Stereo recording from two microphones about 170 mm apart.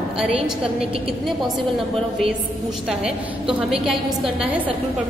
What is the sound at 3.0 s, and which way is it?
Speech, 5° right (ahead or behind).